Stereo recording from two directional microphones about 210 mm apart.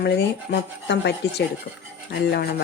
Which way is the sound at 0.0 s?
55° left (ahead or behind).